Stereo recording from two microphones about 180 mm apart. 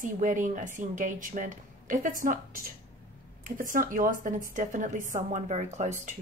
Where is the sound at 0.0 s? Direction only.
45° right (ahead or behind).